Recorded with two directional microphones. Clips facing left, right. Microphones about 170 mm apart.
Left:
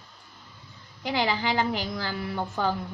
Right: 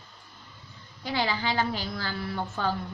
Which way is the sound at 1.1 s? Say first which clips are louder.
Left 2 dB; 20° left (ahead or behind).